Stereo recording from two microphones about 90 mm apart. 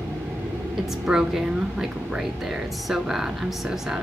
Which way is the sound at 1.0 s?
5° right (ahead or behind).